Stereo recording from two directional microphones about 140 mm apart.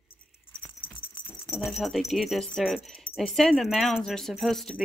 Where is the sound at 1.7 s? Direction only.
Centre (ahead or behind).